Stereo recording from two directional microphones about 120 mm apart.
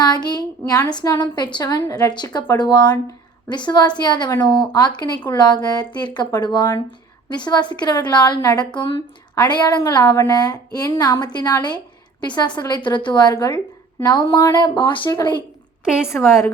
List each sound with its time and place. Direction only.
0.0 s a woman's voice: 35° left (ahead or behind)
16.0 s a woman's voice: 20° left (ahead or behind)